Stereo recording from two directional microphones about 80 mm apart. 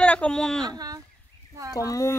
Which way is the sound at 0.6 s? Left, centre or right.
Right.